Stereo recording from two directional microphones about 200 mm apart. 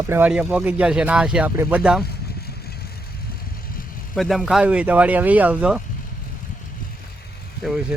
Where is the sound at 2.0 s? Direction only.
50° left (ahead or behind).